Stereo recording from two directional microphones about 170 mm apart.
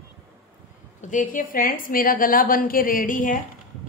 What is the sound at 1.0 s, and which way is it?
A woman's voice, 50° left (ahead or behind).